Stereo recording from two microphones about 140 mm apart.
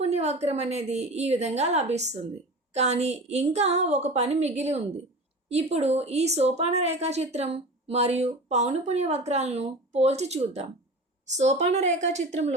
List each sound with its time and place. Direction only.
0.0 s speech: 50° right (ahead or behind)